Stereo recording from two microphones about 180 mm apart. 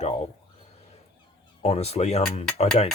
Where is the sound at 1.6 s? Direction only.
35° left (ahead or behind).